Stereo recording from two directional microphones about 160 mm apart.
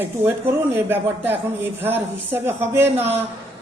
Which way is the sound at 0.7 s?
15° right (ahead or behind).